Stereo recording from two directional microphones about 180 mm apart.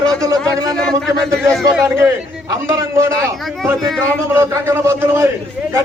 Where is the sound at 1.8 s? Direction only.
15° right (ahead or behind).